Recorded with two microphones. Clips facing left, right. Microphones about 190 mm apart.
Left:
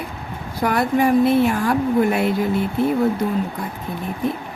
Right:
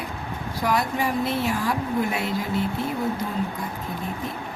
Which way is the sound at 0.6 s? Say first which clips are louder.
Left 6 dB; 55° left (ahead or behind).